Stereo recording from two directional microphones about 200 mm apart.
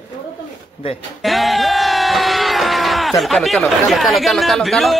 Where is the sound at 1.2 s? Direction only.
Centre (ahead or behind).